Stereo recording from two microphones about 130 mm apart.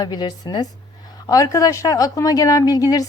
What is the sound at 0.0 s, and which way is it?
Speech, 30° left (ahead or behind).